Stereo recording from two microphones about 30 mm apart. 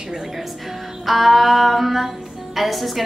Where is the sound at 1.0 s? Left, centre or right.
Centre.